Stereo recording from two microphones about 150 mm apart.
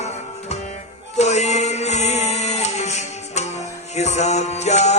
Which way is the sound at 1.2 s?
50° left (ahead or behind).